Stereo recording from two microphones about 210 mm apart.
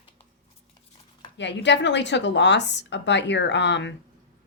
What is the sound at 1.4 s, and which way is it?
A woman's voice, 55° left (ahead or behind).